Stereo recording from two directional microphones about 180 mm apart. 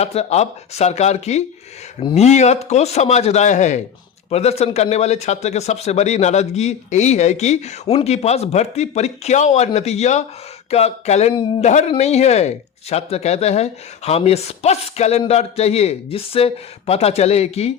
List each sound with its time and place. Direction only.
0.0 s a man's voice: 35° left (ahead or behind)